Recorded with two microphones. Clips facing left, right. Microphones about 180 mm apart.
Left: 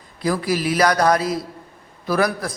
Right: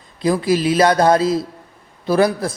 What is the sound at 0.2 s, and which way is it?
Speech, 25° right (ahead or behind).